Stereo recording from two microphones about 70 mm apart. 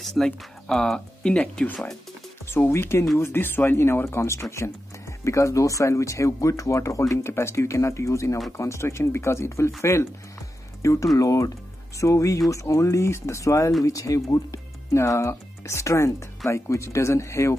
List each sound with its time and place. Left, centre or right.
0.0 s speech: centre
2.5 s speech: left
15.0 s speech: left